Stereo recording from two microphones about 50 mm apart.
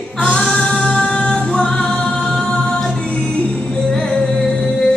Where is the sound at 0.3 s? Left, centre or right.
Centre.